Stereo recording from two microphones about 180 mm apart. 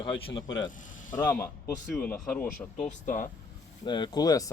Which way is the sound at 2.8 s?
45° left (ahead or behind).